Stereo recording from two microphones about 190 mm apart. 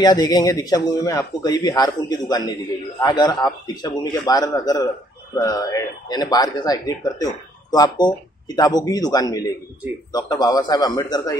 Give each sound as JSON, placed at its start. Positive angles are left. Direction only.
{"t": 0.0, "sound": "speech", "side_deg": 20}